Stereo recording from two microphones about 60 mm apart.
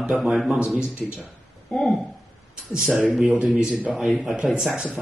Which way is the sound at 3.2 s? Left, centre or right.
Right.